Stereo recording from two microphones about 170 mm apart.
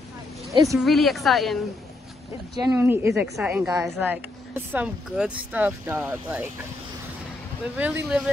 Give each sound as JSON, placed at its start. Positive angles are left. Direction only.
{"t": 0.5, "sound": "speech", "side_deg": -20}
{"t": 0.7, "sound": "a woman's voice", "side_deg": 0}
{"t": 2.5, "sound": "speech", "side_deg": -20}
{"t": 7.7, "sound": "speech", "side_deg": -10}